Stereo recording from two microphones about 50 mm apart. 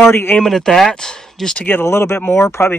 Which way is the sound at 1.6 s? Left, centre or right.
Left.